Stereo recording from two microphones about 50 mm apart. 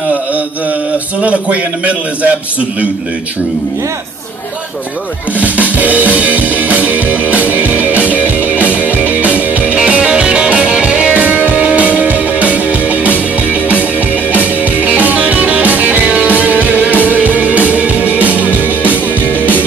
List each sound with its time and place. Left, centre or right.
1.2 s a man's voice: right
5.4 s music: right
14.3 s music: right